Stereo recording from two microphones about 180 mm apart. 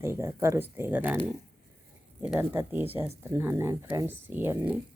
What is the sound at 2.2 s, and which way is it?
Speech, 10° right (ahead or behind).